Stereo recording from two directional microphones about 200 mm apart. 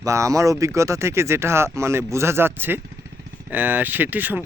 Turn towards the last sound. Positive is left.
turn(degrees=-10)  # may be behind; listen again after turning